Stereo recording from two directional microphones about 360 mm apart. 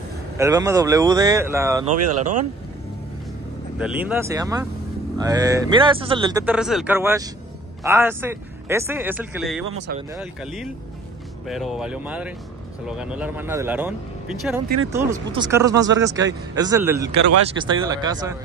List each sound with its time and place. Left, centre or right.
0.4 s speech: centre
2.1 s speech: centre
3.7 s speech: centre